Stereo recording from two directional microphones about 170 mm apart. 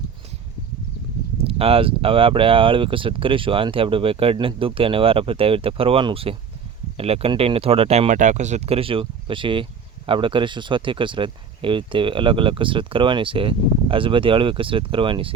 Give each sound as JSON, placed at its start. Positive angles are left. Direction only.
{"t": 1.5, "sound": "speech", "side_deg": -35}